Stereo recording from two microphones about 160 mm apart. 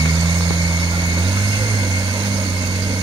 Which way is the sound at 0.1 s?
25° right (ahead or behind).